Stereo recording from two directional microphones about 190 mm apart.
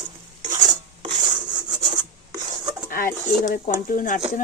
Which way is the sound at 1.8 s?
25° right (ahead or behind).